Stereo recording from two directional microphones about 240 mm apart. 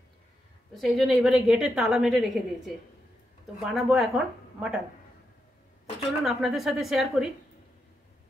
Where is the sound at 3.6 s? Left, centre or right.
Centre.